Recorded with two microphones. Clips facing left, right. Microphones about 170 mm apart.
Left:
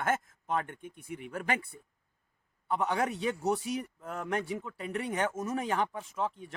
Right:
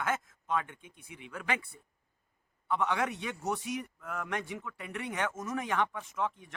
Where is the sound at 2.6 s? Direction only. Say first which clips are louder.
Left 1 dB; 35° left (ahead or behind).